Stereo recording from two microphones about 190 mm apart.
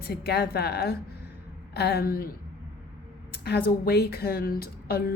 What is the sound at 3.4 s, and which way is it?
A woman's voice, 55° left (ahead or behind).